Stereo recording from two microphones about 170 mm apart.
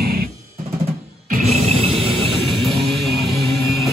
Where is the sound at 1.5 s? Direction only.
35° right (ahead or behind).